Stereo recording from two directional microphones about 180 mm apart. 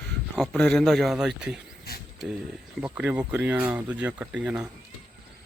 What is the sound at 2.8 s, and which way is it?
Speech, 10° right (ahead or behind).